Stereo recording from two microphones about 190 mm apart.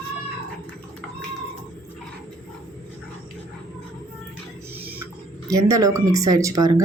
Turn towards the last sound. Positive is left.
turn(degrees=-15)  # may be behind; listen again after turning